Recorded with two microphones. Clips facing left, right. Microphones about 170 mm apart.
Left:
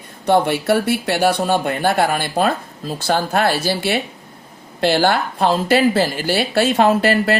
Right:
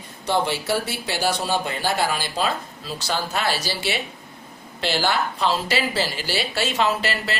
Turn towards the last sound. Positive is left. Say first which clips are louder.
# left 9 dB
turn(degrees=50)  # may be behind; listen again after turning